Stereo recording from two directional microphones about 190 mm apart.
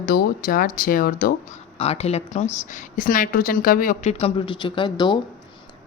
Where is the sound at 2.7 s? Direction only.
45° left (ahead or behind).